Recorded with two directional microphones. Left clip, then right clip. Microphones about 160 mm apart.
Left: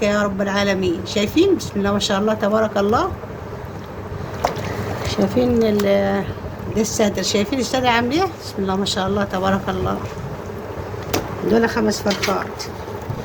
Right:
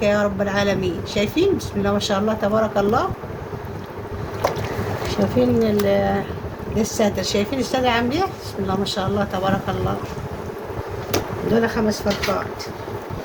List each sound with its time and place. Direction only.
0.0 s speech: 75° left (ahead or behind)
5.0 s a woman's voice: 90° left
11.5 s a woman's voice: 90° left